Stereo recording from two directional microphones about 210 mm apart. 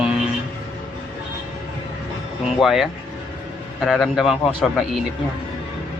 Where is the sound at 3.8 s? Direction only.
Centre (ahead or behind).